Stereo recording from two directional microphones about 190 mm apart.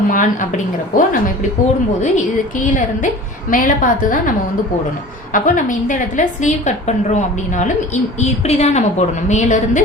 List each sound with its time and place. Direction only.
0.1 s a woman's voice: 45° left (ahead or behind)
5.3 s a woman's voice: 45° left (ahead or behind)